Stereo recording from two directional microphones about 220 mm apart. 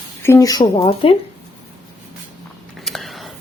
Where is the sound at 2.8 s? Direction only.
Centre (ahead or behind).